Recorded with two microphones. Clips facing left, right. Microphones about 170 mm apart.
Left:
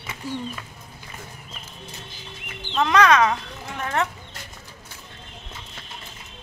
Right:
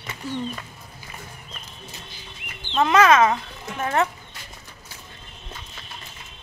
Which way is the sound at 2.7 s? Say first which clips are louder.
Right 1 dB; 5° right (ahead or behind).